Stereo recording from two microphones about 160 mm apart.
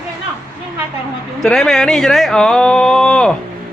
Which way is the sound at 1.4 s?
5° left (ahead or behind).